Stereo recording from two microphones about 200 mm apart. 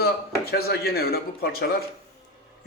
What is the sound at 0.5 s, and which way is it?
A man's voice, 50° left (ahead or behind).